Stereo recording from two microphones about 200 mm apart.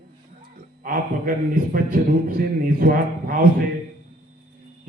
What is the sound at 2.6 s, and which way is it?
Speech, 45° right (ahead or behind).